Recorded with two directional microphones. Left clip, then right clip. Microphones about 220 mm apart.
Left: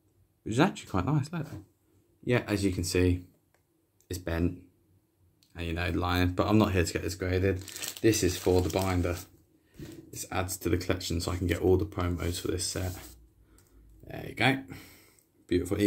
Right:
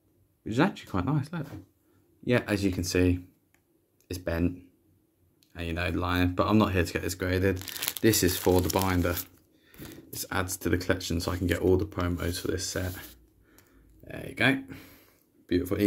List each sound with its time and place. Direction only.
0.4 s speech: centre (ahead or behind)
7.5 s speech: 45° right (ahead or behind)
8.0 s speech: 20° right (ahead or behind)
14.0 s speech: 5° right (ahead or behind)